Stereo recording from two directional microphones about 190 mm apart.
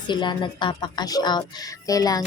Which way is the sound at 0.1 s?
25° left (ahead or behind).